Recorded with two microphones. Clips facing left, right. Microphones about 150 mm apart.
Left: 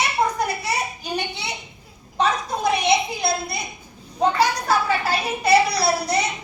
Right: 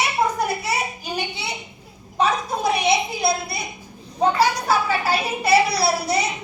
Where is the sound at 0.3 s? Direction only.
5° right (ahead or behind).